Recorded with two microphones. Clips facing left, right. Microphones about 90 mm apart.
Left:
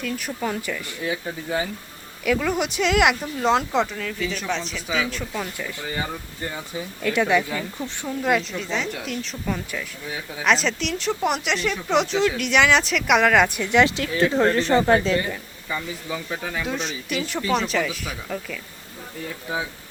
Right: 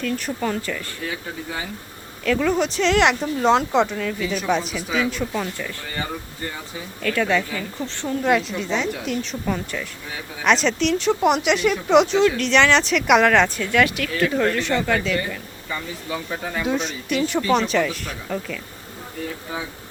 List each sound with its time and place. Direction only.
0.0 s speech: 5° left (ahead or behind)
2.2 s speech: 10° left (ahead or behind)
7.0 s speech: 15° left (ahead or behind)
8.0 s speech: centre (ahead or behind); by 15.2 s 30° left (ahead or behind)
16.1 s speech: centre (ahead or behind)